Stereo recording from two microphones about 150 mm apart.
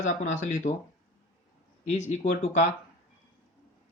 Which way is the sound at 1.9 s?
50° left (ahead or behind).